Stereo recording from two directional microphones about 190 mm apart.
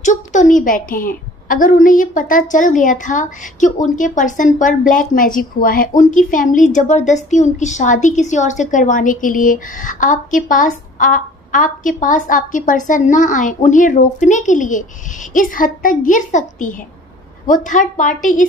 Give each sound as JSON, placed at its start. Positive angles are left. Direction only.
{"t": 0.0, "sound": "a woman's voice", "side_deg": 40}